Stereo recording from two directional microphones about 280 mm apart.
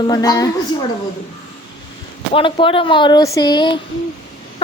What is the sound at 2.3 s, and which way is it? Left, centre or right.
Speech, centre.